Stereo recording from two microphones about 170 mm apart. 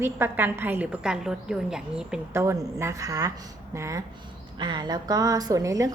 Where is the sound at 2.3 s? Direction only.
20° right (ahead or behind).